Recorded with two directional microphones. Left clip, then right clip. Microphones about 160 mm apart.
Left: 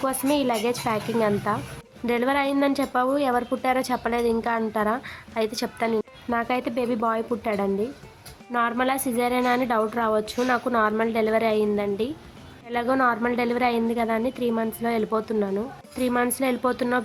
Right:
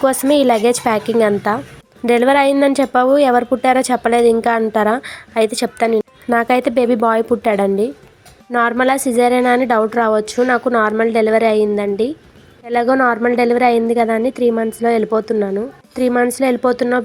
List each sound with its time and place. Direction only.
0.0 s a woman's voice: 30° right (ahead or behind)